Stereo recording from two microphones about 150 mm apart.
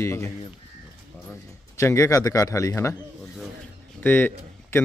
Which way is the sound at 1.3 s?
20° left (ahead or behind).